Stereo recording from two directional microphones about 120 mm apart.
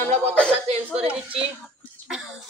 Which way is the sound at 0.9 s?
55° right (ahead or behind).